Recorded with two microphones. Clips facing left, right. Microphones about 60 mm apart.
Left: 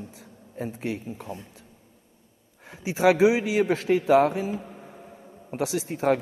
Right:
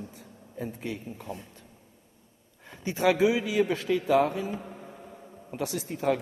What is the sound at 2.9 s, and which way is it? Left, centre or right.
Speech, left.